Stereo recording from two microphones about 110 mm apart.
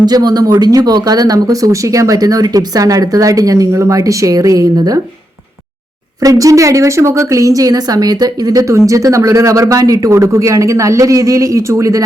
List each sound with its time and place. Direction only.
0.0 s speech: 40° right (ahead or behind)
6.2 s speech: 30° right (ahead or behind)